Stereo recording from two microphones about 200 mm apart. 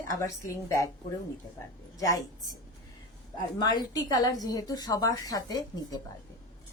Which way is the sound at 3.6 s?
20° left (ahead or behind).